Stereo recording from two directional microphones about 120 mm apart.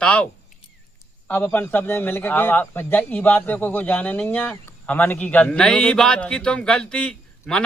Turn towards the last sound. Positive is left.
turn(degrees=10)  # may be behind; listen again after turning